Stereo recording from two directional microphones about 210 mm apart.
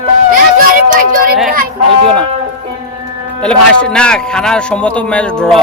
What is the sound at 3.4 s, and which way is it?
A man's voice, 5° left (ahead or behind).